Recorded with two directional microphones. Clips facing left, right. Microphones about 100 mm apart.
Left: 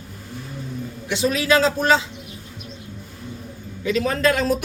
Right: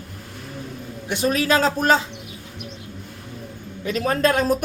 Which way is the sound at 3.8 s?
45° right (ahead or behind).